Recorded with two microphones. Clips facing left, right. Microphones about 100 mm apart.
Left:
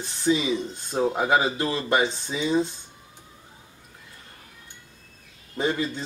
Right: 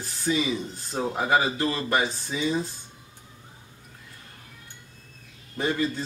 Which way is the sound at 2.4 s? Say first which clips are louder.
Left 4 dB; 25° left (ahead or behind).